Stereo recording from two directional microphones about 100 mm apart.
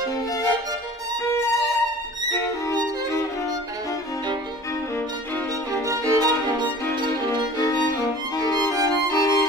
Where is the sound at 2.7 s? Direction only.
45° right (ahead or behind).